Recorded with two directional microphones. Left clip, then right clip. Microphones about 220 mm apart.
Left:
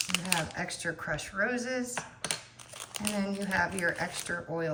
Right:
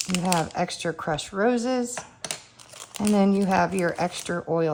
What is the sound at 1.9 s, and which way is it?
Computer keyboard, centre (ahead or behind).